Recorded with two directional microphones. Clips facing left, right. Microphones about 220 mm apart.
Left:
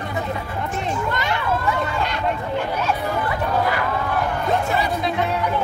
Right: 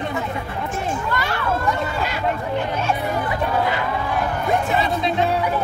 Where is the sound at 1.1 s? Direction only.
20° left (ahead or behind).